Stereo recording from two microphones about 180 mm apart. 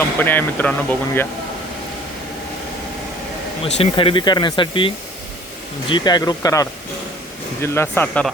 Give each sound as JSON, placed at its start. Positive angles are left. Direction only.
{"t": 0.2, "sound": "speech", "side_deg": 10}
{"t": 3.8, "sound": "speech", "side_deg": 30}
{"t": 5.9, "sound": "speech", "side_deg": 25}